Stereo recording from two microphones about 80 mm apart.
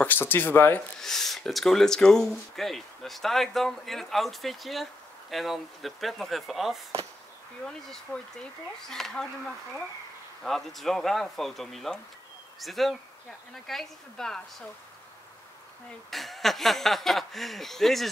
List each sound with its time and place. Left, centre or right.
0.0 s speech: left
1.0 s speech: centre
10.4 s speech: centre
16.1 s speech: centre